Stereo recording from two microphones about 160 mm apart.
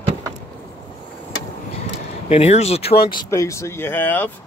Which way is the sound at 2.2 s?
40° left (ahead or behind).